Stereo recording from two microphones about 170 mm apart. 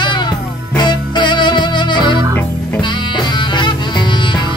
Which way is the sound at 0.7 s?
25° left (ahead or behind).